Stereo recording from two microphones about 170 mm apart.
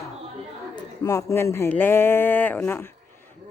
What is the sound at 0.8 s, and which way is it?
Speech, 20° left (ahead or behind).